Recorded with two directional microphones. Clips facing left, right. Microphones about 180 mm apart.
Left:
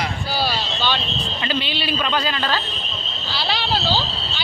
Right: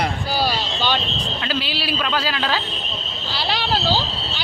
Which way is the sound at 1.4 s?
5° right (ahead or behind).